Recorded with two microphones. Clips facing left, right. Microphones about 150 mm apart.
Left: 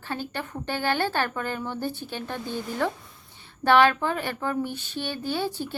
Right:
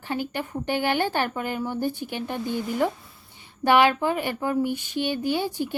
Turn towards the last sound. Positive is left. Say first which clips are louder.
# right 3 dB
turn(degrees=-15)  # may be behind; listen again after turning